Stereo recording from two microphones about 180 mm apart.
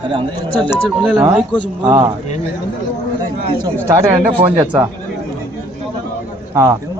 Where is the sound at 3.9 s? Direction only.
15° right (ahead or behind).